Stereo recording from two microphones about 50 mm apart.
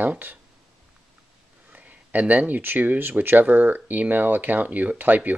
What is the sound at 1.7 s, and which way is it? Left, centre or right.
Speech, right.